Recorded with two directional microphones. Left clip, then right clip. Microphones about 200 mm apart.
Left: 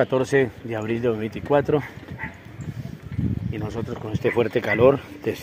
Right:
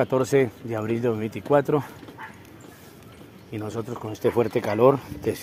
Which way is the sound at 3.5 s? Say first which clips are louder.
Right 4 dB; centre (ahead or behind).